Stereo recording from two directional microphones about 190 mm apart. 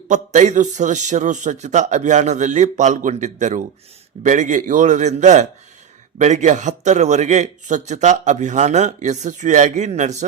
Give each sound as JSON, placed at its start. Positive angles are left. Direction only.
{"t": 0.1, "sound": "a man's voice", "side_deg": -40}